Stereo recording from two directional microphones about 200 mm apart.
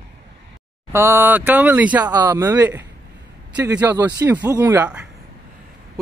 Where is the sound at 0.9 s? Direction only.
10° right (ahead or behind).